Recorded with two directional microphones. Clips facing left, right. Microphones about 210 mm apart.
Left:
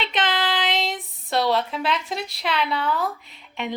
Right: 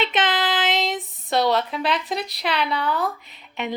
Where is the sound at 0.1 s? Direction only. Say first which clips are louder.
Right 2 dB; centre (ahead or behind).